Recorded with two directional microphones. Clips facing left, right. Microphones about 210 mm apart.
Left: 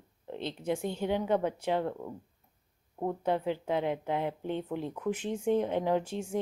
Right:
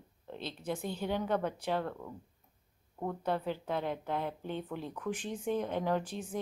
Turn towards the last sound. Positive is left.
turn(degrees=20)  # may be behind; listen again after turning